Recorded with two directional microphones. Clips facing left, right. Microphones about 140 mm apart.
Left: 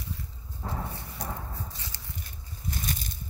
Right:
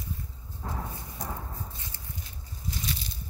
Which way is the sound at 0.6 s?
5° left (ahead or behind).